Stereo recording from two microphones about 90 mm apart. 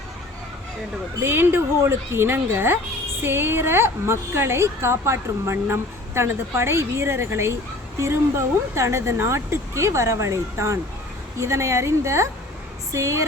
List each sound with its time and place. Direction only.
1.2 s a woman's voice: 25° right (ahead or behind)